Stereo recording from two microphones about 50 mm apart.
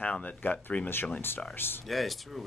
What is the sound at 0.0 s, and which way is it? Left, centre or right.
Speech, left.